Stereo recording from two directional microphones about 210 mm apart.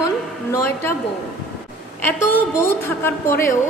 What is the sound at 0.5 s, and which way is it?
Speech, 10° left (ahead or behind).